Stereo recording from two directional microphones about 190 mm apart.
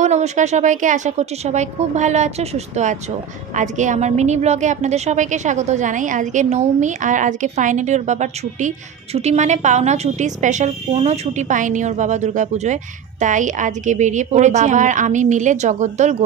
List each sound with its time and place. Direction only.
0.0 s a woman's voice: 35° right (ahead or behind)